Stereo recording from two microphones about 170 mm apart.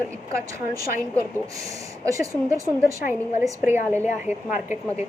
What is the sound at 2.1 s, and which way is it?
Speech, 20° right (ahead or behind).